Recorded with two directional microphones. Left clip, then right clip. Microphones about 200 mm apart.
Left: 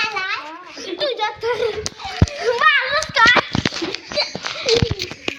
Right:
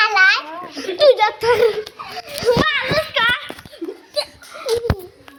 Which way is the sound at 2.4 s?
15° left (ahead or behind).